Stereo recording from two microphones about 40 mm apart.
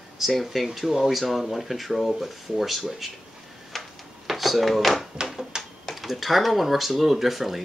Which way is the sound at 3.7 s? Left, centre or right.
Centre.